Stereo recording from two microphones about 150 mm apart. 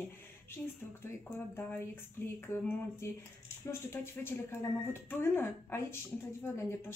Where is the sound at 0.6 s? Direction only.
15° left (ahead or behind).